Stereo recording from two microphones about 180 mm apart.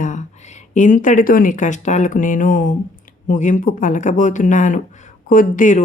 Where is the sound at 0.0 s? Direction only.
40° left (ahead or behind).